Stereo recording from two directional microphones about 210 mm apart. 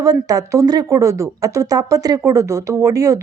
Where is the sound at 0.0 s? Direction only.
15° right (ahead or behind).